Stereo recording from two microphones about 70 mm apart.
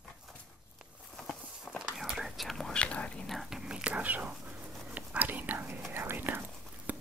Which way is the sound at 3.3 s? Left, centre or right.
Centre.